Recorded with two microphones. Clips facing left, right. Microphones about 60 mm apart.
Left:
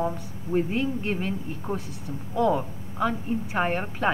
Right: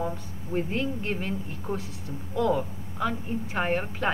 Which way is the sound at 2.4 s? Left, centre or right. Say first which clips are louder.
Left 2 dB; centre.